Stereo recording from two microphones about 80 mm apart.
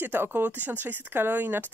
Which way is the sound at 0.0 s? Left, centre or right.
Right.